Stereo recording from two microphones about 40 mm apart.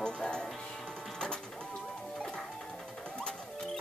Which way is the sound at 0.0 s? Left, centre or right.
Left.